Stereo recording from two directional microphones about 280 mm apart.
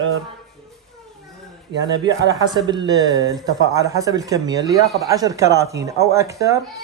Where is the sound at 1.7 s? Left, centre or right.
Right.